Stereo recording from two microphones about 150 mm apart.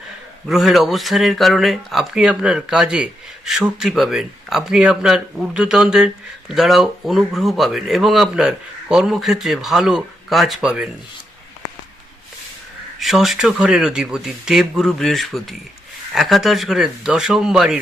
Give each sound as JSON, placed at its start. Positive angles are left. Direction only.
{"t": 0.4, "sound": "speech", "side_deg": 0}
{"t": 13.0, "sound": "speech", "side_deg": 0}